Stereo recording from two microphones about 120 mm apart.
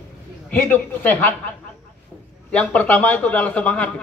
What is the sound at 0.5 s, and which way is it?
A man's voice, 15° left (ahead or behind).